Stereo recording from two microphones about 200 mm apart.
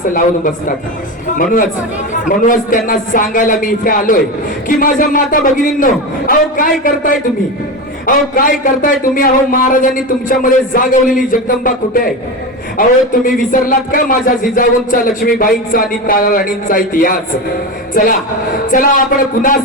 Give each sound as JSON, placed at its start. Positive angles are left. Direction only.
{"t": 0.1, "sound": "a woman's voice", "side_deg": 40}
{"t": 2.2, "sound": "speech", "side_deg": 45}
{"t": 13.5, "sound": "speech", "side_deg": 45}